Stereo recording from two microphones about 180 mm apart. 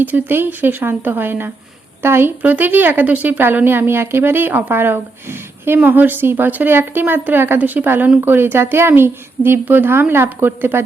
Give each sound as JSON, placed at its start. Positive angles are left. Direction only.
{"t": 0.0, "sound": "a woman's voice", "side_deg": -10}